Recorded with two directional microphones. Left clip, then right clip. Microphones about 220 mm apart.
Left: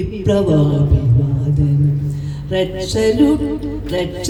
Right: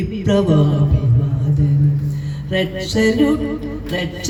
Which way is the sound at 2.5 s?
55° left (ahead or behind).